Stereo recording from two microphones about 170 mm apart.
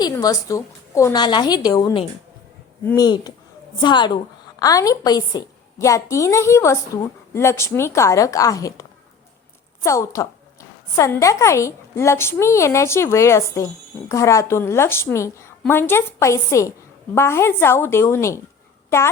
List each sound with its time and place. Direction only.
0.0 s a woman's voice: 20° left (ahead or behind)